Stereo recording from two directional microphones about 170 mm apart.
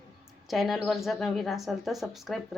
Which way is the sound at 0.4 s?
Centre (ahead or behind).